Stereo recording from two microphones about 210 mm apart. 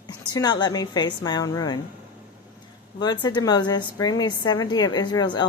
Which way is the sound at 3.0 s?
20° left (ahead or behind).